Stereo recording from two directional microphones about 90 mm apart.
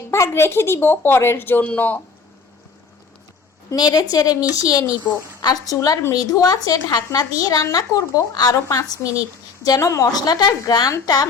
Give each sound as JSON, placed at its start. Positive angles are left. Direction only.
{"t": 0.1, "sound": "speech", "side_deg": 30}
{"t": 3.7, "sound": "a woman's voice", "side_deg": 50}
{"t": 8.5, "sound": "a woman's voice", "side_deg": 35}